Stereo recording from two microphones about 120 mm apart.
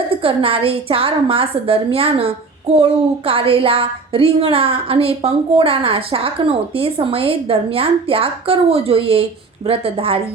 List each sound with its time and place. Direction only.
0.2 s a woman's voice: 50° right (ahead or behind)